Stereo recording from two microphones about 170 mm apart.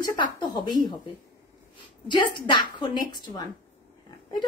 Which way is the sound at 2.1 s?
30° left (ahead or behind).